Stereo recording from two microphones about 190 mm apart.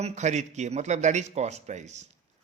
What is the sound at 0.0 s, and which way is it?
A man's voice, 35° right (ahead or behind).